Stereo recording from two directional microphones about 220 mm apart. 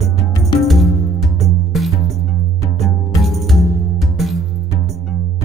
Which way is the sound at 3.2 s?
Centre (ahead or behind).